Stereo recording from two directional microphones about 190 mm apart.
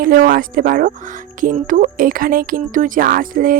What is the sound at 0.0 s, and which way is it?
Speech, 50° right (ahead or behind).